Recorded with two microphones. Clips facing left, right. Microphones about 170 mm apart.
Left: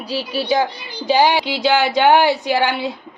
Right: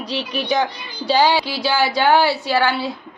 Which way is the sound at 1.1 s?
20° left (ahead or behind).